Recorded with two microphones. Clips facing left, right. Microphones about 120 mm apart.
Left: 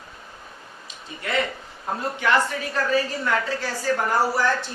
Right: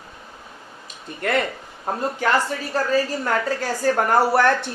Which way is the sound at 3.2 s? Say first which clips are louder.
Right 2 dB; 50° right (ahead or behind).